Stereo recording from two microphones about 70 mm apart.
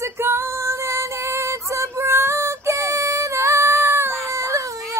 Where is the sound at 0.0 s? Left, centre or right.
Right.